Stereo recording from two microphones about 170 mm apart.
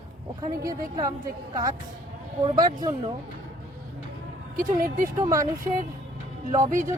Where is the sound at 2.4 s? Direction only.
25° right (ahead or behind).